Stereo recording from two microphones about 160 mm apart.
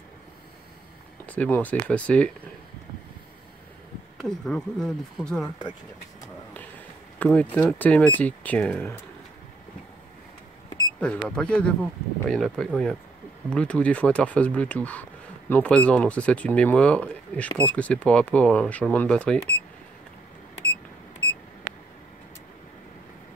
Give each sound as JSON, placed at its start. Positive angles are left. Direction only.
{"t": 1.2, "sound": "speech", "side_deg": 10}
{"t": 4.2, "sound": "speech", "side_deg": 5}
{"t": 7.2, "sound": "speech", "side_deg": 10}
{"t": 11.0, "sound": "speech", "side_deg": 5}
{"t": 21.7, "sound": "a sound", "side_deg": -90}